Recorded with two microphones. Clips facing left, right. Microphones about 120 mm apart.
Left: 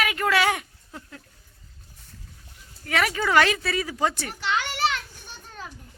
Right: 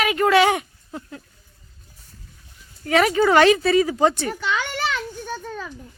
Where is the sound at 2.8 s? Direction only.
25° right (ahead or behind).